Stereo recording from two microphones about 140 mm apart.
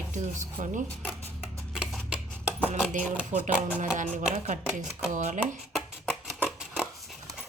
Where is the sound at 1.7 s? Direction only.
5° right (ahead or behind).